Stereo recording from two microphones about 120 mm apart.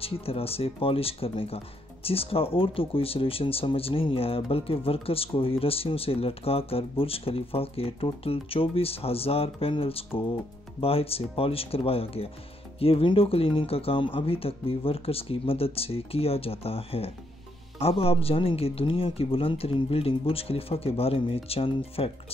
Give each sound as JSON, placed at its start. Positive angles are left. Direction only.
{"t": 0.0, "sound": "speech", "side_deg": 55}